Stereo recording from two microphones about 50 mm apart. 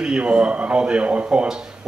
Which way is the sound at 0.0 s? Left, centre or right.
Right.